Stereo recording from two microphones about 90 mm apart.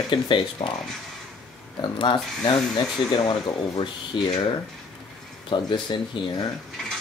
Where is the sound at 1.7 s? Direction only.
60° left (ahead or behind).